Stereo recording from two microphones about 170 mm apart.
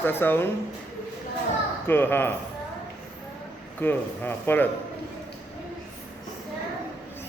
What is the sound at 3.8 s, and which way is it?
Speech, 10° left (ahead or behind).